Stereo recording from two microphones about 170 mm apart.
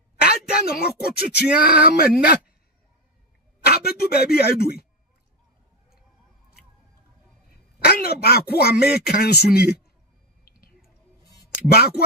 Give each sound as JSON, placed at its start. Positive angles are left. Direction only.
{"t": 0.2, "sound": "speech", "side_deg": 65}
{"t": 3.6, "sound": "speech", "side_deg": 65}
{"t": 7.8, "sound": "speech", "side_deg": 65}